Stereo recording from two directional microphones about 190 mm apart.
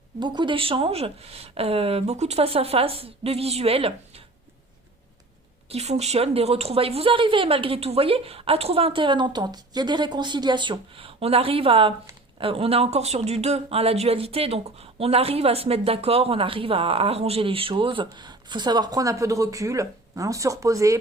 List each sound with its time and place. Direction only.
0.2 s speech: 25° right (ahead or behind)
5.7 s speech: 35° right (ahead or behind); by 21.0 s 15° right (ahead or behind)